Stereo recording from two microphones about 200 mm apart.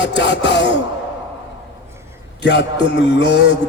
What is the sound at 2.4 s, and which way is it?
Speech, 60° left (ahead or behind).